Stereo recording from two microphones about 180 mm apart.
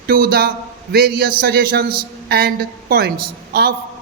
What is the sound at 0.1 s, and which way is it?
A man's voice, 60° right (ahead or behind).